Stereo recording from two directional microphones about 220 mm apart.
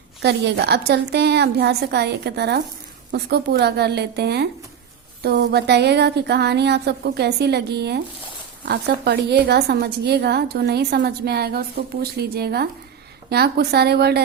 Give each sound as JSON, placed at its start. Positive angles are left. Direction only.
{"t": 0.2, "sound": "a woman's voice", "side_deg": -50}